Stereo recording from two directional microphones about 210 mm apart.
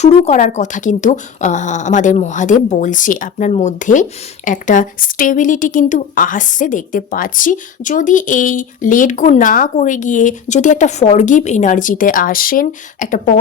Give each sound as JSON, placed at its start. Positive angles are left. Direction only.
{"t": 0.0, "sound": "speech", "side_deg": 30}